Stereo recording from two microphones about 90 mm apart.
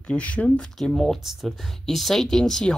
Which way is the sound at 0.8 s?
5° left (ahead or behind).